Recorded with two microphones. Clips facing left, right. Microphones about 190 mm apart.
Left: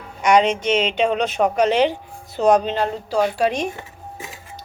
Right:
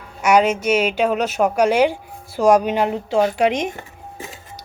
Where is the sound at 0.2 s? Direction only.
5° right (ahead or behind).